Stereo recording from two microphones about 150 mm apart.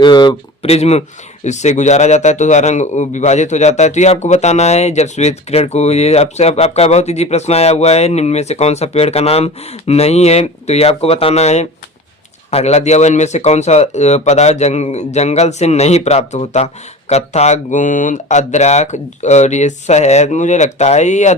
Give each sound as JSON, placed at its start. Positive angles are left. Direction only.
{"t": 0.0, "sound": "speech", "side_deg": 30}
{"t": 0.6, "sound": "a man's voice", "side_deg": 45}